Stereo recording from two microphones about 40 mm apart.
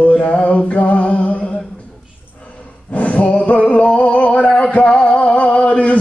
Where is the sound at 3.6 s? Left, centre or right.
Left.